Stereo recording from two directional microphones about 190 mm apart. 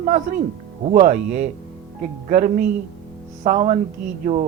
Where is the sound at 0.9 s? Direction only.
45° right (ahead or behind).